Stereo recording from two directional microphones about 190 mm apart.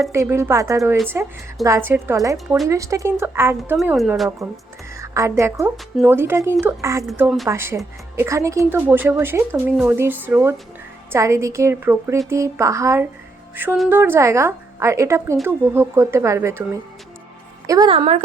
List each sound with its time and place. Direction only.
0.1 s speech: 15° right (ahead or behind)
3.6 s a woman's voice: centre (ahead or behind)
4.9 s a woman's voice: 15° right (ahead or behind)
7.4 s speech: 15° right (ahead or behind)
17.7 s a woman's voice: 20° right (ahead or behind)
17.9 s speech: 30° right (ahead or behind)